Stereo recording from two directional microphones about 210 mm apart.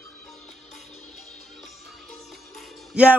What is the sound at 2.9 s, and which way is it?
Speech, 5° right (ahead or behind).